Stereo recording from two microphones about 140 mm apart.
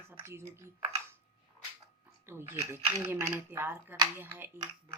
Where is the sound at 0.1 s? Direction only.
20° right (ahead or behind).